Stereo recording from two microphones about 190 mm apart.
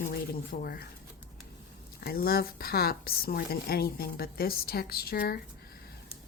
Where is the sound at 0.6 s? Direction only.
50° left (ahead or behind).